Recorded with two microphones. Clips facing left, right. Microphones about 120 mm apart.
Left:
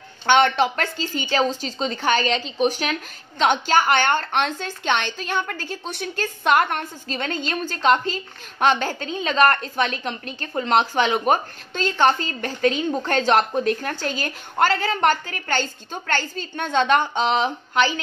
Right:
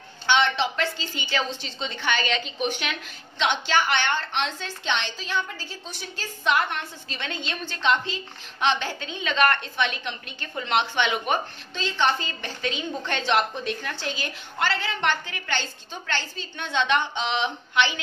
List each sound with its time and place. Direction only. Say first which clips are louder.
0.3 s a woman's voice: left 5 dB; 50° left (ahead or behind)